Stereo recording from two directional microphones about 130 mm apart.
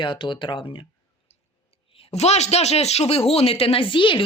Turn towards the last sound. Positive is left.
turn(degrees=40)  # may be behind; listen again after turning